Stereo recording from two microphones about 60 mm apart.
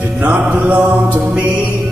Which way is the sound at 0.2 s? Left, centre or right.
Right.